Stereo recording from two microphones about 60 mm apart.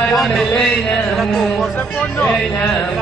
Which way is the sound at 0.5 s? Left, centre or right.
Centre.